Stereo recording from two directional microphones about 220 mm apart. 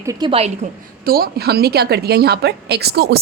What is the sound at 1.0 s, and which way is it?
A woman's voice, 40° right (ahead or behind).